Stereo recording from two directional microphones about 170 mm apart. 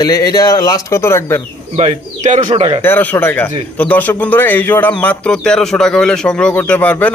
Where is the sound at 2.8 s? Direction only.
10° left (ahead or behind).